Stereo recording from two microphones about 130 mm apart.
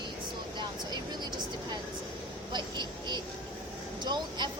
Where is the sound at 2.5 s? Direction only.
35° right (ahead or behind).